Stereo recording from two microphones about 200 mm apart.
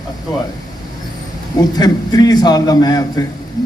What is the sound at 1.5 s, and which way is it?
A man's voice, 20° left (ahead or behind).